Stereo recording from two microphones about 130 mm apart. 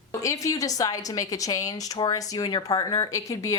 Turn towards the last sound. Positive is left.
turn(degrees=25)  # may be behind; listen again after turning